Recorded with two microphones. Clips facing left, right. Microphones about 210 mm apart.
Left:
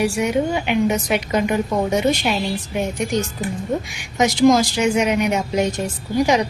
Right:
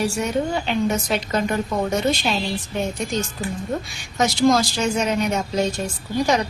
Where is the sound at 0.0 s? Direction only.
15° left (ahead or behind).